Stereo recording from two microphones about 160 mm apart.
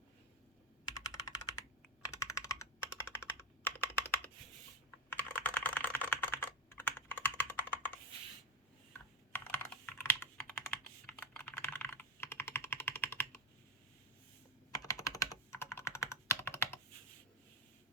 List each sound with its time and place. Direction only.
0.9 s computer keyboard: 25° left (ahead or behind)
8.9 s computer keyboard: 10° left (ahead or behind)
14.7 s computer keyboard: 20° left (ahead or behind)